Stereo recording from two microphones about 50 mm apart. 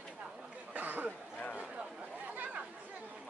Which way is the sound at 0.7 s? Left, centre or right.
Right.